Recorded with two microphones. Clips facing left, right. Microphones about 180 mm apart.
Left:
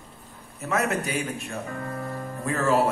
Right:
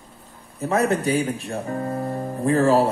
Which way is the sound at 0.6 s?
30° right (ahead or behind).